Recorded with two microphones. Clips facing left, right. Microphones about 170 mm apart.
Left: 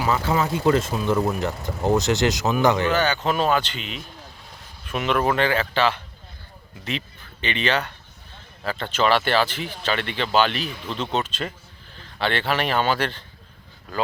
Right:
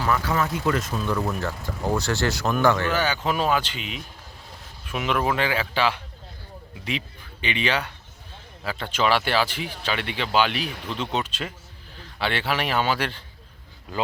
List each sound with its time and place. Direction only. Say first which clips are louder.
0.1 s speech: left 2 dB; 25° left (ahead or behind)
2.9 s speech: left 3 dB; 10° right (ahead or behind)